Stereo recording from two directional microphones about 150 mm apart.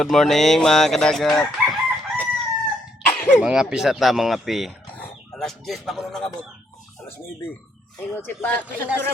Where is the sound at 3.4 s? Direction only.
5° right (ahead or behind).